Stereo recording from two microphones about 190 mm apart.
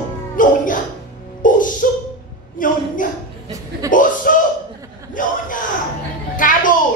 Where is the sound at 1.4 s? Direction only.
45° left (ahead or behind).